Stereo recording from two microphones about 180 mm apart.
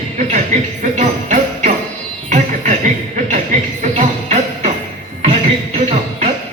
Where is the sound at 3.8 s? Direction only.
40° right (ahead or behind).